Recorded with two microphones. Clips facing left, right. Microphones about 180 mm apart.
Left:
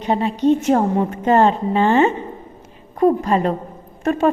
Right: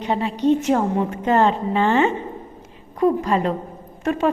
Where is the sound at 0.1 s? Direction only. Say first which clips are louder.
Left 2 dB; 40° left (ahead or behind).